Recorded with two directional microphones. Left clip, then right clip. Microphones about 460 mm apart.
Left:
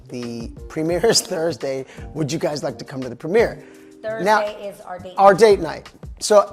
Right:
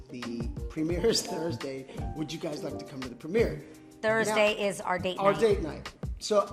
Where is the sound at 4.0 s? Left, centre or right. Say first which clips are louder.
Left 7 dB; right.